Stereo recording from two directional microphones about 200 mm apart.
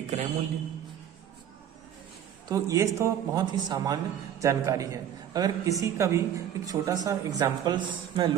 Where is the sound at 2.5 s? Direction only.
15° right (ahead or behind).